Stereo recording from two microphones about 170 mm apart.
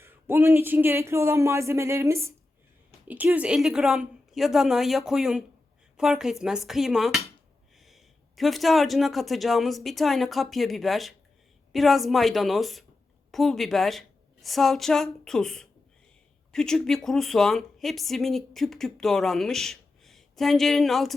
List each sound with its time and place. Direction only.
0.0 s a woman's voice: 10° right (ahead or behind)